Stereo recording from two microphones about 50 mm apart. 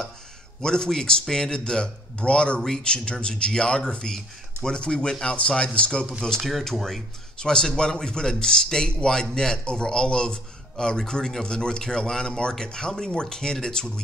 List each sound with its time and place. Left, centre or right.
0.6 s speech: centre
6.4 s speech: centre